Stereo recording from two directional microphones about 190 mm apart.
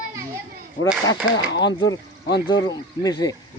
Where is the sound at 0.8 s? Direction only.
80° left.